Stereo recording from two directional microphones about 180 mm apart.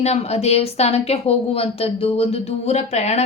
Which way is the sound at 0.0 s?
35° left (ahead or behind).